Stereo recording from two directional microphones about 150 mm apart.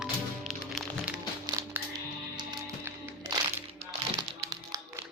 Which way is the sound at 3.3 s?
25° right (ahead or behind).